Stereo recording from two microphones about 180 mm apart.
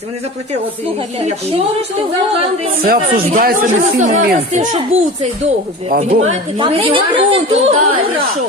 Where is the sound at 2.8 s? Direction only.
55° right (ahead or behind); by 4.8 s 40° right (ahead or behind).